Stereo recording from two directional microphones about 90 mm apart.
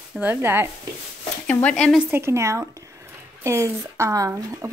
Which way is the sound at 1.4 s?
10° left (ahead or behind).